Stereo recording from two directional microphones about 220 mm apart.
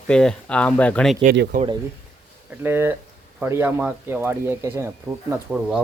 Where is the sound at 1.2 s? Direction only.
45° right (ahead or behind).